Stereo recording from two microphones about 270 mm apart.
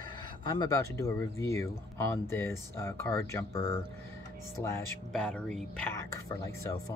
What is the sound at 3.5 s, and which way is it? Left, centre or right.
Speech, left.